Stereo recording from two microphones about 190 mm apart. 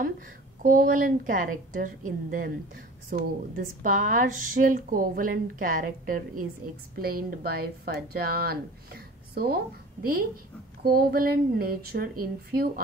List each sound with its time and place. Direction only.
0.6 s a woman's voice: 45° right (ahead or behind)
10.8 s a woman's voice: 50° right (ahead or behind)